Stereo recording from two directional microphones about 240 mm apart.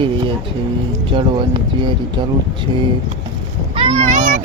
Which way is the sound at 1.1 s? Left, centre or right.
Centre.